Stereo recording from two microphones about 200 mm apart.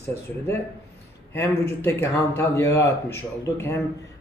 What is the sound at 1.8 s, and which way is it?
Speech, 10° left (ahead or behind).